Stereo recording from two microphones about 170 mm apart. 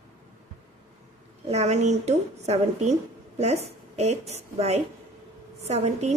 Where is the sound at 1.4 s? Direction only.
40° right (ahead or behind).